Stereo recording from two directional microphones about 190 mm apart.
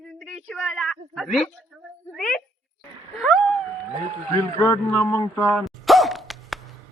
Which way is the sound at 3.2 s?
Centre (ahead or behind).